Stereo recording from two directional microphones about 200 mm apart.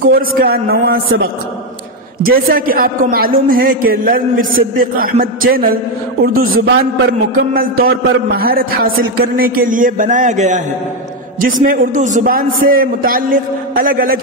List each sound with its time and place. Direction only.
0.4 s a man's voice: 50° right (ahead or behind)